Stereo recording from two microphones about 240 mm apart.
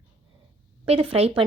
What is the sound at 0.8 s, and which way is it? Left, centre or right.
Speech, right.